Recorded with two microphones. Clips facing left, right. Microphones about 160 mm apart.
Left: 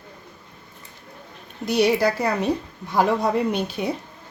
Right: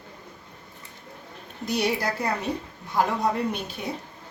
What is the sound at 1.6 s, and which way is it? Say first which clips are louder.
Speech: left 7 dB; 75° left (ahead or behind).